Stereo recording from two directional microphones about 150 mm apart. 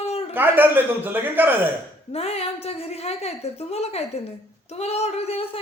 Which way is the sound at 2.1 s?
40° left (ahead or behind).